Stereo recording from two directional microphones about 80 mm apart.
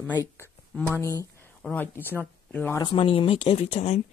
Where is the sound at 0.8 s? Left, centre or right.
Left.